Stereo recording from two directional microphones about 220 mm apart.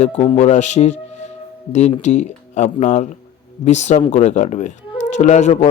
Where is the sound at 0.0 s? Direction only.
30° left (ahead or behind).